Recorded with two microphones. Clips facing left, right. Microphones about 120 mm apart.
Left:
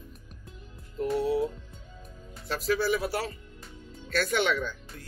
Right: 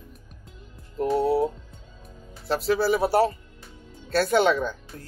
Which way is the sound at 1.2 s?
30° right (ahead or behind).